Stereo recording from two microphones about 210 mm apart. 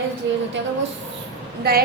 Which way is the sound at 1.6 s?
50° right (ahead or behind).